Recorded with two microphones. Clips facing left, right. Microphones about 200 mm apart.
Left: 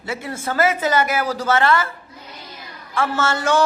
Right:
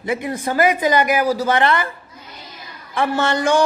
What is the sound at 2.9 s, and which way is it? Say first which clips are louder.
Speech: right 2 dB; 15° right (ahead or behind).